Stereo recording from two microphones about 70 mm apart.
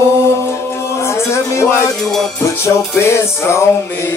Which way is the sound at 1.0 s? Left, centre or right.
Left.